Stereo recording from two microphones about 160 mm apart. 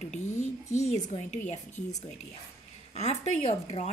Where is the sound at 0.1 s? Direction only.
45° left (ahead or behind).